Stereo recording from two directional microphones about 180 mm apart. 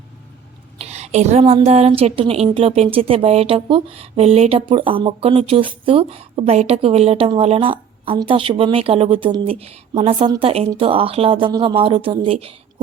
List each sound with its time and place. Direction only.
0.8 s a woman's voice: 35° right (ahead or behind)